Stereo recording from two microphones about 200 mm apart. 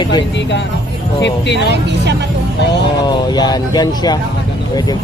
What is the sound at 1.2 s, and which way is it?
Speech, 60° left (ahead or behind).